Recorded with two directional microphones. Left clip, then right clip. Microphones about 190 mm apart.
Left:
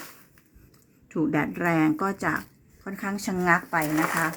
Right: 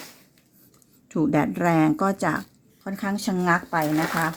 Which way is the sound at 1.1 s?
45° right (ahead or behind).